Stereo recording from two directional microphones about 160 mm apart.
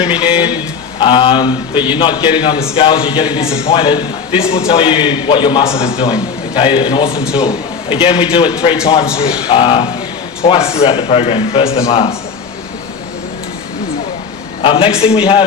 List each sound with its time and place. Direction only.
0.1 s speech: 35° left (ahead or behind)
0.3 s a sound: 10° right (ahead or behind)
0.9 s a man's voice: 30° left (ahead or behind)
14.6 s a man's voice: 35° left (ahead or behind)